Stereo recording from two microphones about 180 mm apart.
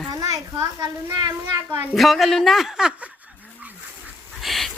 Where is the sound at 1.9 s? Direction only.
Centre (ahead or behind).